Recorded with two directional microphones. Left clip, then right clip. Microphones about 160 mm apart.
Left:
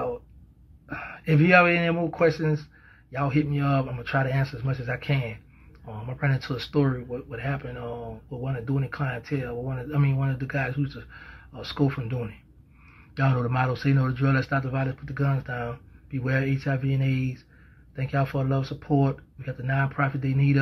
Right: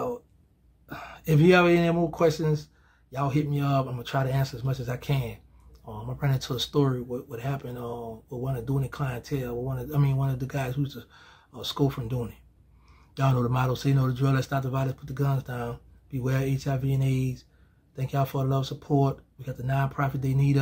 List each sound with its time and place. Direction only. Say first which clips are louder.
0.8 s a man's voice: left 2 dB; 45° right (ahead or behind)